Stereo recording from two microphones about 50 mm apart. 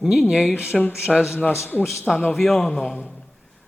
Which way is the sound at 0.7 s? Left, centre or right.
Centre.